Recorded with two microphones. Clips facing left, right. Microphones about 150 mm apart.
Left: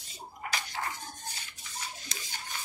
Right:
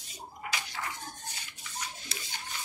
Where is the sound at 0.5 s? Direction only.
45° left (ahead or behind).